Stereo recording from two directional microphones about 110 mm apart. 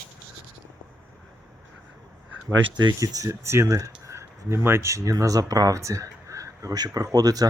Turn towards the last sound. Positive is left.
turn(degrees=-35)  # may be behind; listen again after turning